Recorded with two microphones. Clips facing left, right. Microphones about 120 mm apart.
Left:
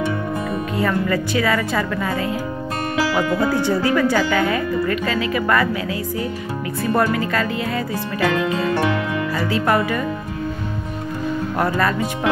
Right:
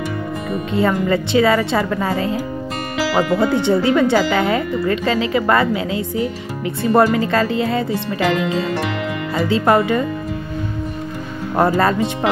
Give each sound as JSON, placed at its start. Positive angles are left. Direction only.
{"t": 0.7, "sound": "speech", "side_deg": -25}
{"t": 6.8, "sound": "speech", "side_deg": -30}
{"t": 9.5, "sound": "speech", "side_deg": -25}
{"t": 11.5, "sound": "speech", "side_deg": -30}